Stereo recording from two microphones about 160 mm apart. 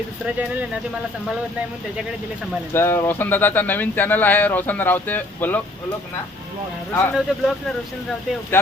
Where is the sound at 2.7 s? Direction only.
15° left (ahead or behind).